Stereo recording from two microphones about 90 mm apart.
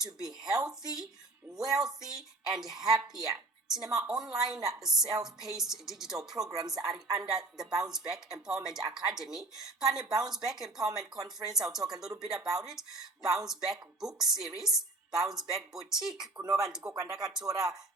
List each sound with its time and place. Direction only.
0.4 s a woman's voice: 5° right (ahead or behind)
3.2 s a sound: 5° right (ahead or behind)
3.8 s a woman's voice: 5° right (ahead or behind)
8.8 s speech: 50° right (ahead or behind)
9.1 s a woman's voice: 5° right (ahead or behind)
11.2 s speech: 45° right (ahead or behind)
11.5 s a woman's voice: 5° right (ahead or behind)
16.8 s speech: 40° right (ahead or behind)